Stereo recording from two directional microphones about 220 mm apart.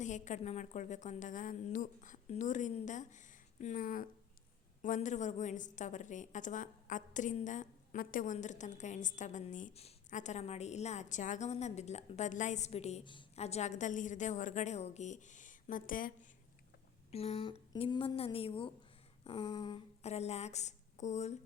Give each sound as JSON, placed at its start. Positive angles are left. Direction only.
{"t": 0.0, "sound": "a woman's voice", "side_deg": 35}
{"t": 17.1, "sound": "a woman's voice", "side_deg": 25}